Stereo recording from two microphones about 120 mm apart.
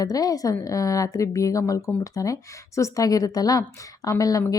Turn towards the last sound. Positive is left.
turn(degrees=30)  # may be behind; listen again after turning